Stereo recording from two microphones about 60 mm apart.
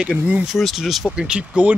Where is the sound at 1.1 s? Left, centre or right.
Centre.